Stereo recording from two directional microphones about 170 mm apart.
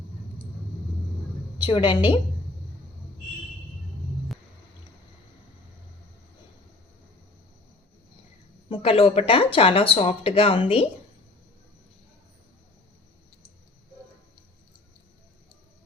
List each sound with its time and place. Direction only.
1.6 s a woman's voice: 25° left (ahead or behind)
8.7 s speech: 35° left (ahead or behind)